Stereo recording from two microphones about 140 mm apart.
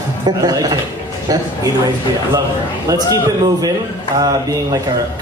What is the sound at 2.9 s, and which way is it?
Speech, 25° right (ahead or behind).